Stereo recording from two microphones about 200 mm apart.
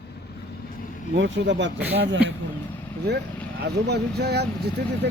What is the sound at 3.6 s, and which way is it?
Speech, 55° right (ahead or behind).